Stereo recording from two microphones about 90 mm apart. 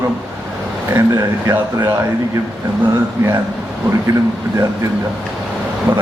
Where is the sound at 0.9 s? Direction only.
35° right (ahead or behind).